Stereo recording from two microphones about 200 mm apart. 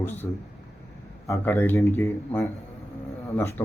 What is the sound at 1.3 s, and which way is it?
Speech, 10° left (ahead or behind).